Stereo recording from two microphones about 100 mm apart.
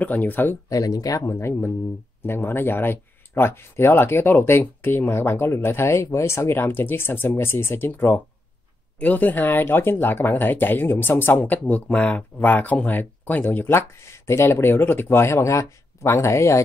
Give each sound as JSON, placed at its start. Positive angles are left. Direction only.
{"t": 0.0, "sound": "speech", "side_deg": 15}
{"t": 0.7, "sound": "speech", "side_deg": 35}
{"t": 1.3, "sound": "speech", "side_deg": 25}